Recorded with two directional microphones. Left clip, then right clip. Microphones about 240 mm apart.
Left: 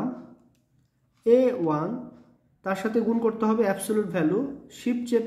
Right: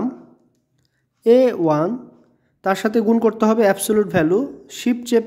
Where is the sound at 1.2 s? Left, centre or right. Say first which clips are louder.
Right 7 dB; right.